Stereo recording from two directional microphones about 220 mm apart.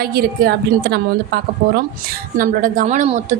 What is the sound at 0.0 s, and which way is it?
A woman's voice, 45° right (ahead or behind).